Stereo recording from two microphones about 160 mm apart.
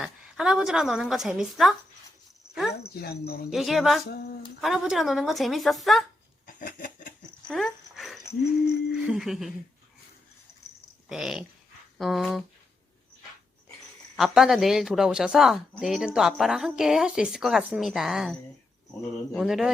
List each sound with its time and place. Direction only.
0.0 s speech: 5° right (ahead or behind)
2.9 s speech: 80° left
3.5 s speech: centre (ahead or behind)
6.5 s laughter: 60° left (ahead or behind)
7.4 s dog: 5° left (ahead or behind)
8.6 s speech: 5° right (ahead or behind)
11.1 s speech: 5° right (ahead or behind)
14.2 s speech: centre (ahead or behind)